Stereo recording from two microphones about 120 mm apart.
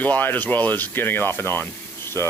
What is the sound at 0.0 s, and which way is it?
Speech, 15° left (ahead or behind).